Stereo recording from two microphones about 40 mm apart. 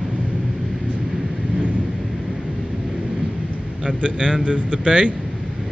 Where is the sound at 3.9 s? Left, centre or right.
Right.